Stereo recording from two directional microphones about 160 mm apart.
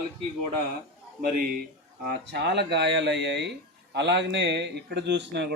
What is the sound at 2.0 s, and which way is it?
A man's voice, 85° right.